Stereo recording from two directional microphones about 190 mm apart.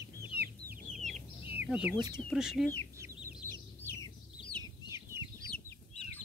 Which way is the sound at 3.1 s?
45° right (ahead or behind).